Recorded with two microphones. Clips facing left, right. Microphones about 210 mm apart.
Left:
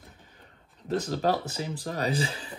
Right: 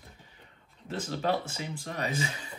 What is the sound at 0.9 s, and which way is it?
Speech, 40° left (ahead or behind).